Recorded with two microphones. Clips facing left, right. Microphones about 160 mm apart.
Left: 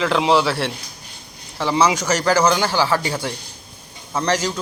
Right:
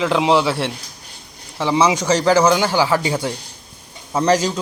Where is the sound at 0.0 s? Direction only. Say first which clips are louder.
Right 1 dB; 15° right (ahead or behind).